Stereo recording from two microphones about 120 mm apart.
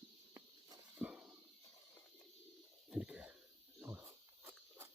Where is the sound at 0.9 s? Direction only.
10° right (ahead or behind).